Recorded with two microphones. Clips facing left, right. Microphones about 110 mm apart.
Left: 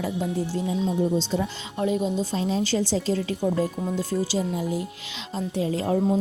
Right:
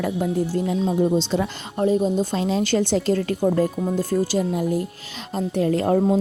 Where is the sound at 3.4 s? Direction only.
45° right (ahead or behind); by 6.2 s 60° right (ahead or behind).